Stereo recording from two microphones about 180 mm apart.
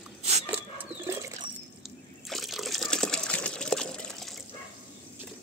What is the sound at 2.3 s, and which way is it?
Water, centre (ahead or behind).